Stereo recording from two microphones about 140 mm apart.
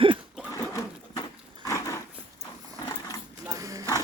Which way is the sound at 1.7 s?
20° left (ahead or behind).